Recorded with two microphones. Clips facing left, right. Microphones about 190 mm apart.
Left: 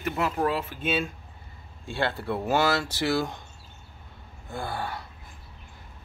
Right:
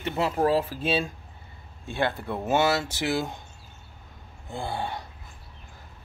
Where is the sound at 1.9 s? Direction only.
20° right (ahead or behind).